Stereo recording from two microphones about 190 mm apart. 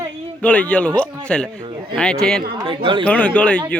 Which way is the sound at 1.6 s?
25° right (ahead or behind).